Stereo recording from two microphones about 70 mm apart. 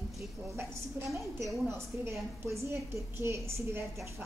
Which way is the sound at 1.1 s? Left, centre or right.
Right.